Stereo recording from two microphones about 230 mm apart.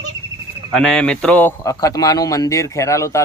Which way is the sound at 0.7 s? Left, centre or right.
Centre.